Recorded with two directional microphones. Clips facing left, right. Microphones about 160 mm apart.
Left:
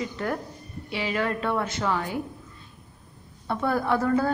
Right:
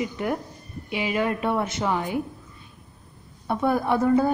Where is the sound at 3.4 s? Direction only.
15° right (ahead or behind).